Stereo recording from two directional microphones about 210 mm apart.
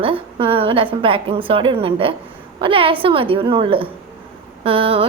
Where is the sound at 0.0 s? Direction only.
25° right (ahead or behind).